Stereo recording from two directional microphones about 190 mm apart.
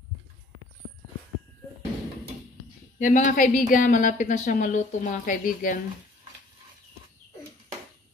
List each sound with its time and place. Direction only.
3.0 s a woman's voice: 40° left (ahead or behind)